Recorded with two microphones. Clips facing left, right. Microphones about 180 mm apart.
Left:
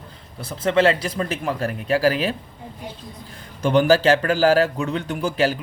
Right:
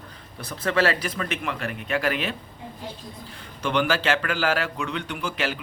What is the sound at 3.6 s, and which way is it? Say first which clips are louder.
A man's voice: left 8 dB; 40° left (ahead or behind).